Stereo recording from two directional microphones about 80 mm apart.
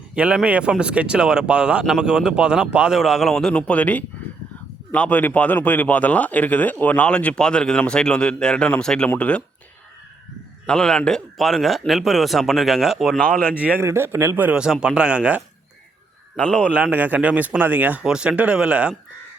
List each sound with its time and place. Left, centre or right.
0.1 s a man's voice: centre
3.7 s speech: centre
10.7 s speech: centre
13.1 s speech: left
13.7 s a man's voice: right
14.5 s a man's voice: centre
16.4 s speech: centre
16.7 s speech: centre
18.0 s a man's voice: centre